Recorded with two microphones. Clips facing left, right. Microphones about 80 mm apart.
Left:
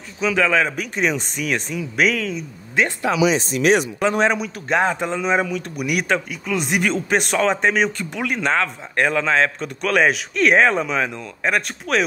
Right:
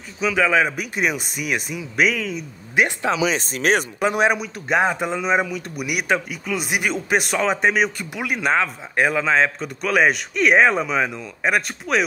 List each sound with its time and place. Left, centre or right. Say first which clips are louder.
0.2 s speech: even; centre
3.0 s speech: left 2 dB; right
3.3 s speech: left 3 dB; right
4.0 s a man's voice: left 1 dB; centre